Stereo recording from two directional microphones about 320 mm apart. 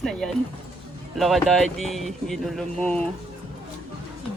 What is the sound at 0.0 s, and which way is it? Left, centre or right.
Speech, centre.